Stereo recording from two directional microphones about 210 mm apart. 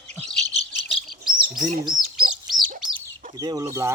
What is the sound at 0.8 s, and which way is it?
Bird, centre (ahead or behind).